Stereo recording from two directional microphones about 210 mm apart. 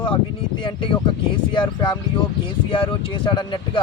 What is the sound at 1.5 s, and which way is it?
Speech, 20° left (ahead or behind).